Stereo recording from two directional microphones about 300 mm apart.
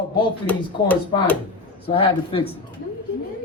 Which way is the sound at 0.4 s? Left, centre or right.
Centre.